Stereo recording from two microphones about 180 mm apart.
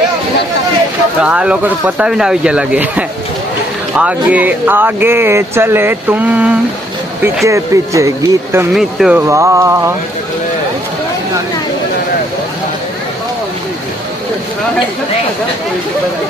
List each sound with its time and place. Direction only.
1.2 s speech: 5° right (ahead or behind)
8.7 s speech: centre (ahead or behind)
9.3 s speech: 15° right (ahead or behind)